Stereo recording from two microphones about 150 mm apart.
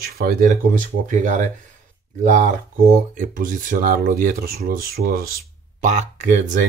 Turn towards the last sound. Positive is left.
turn(degrees=-55)  # may be behind; listen again after turning